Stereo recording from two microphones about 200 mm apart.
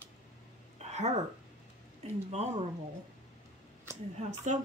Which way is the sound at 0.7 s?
35° right (ahead or behind).